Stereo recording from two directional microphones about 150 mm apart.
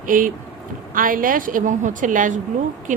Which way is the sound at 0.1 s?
65° right (ahead or behind).